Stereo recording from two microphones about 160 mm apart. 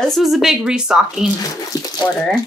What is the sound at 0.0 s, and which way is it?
Speech, centre (ahead or behind).